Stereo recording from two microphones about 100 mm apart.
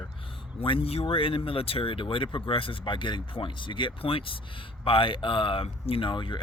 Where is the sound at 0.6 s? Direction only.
65° left (ahead or behind).